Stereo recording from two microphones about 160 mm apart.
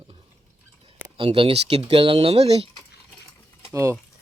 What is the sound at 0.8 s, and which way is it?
Speech, 35° right (ahead or behind).